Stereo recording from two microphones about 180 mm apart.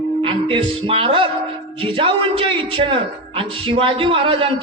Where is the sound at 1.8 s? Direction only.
30° right (ahead or behind).